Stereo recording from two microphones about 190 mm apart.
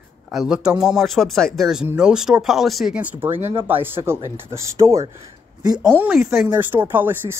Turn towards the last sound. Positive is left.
turn(degrees=-10)  # may be behind; listen again after turning